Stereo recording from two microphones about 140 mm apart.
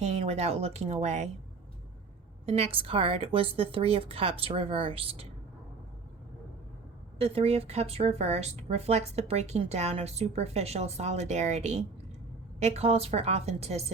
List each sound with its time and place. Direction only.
0.0 s speech: 50° right (ahead or behind)
2.5 s speech: 45° right (ahead or behind)
7.2 s speech: 45° right (ahead or behind)